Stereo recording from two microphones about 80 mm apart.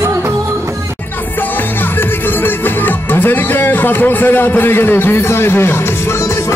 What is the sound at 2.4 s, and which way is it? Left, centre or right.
Music, left.